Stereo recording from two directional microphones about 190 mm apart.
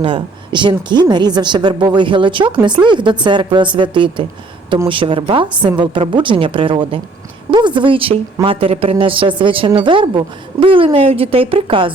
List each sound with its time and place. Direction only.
0.0 s a woman's voice: 25° right (ahead or behind)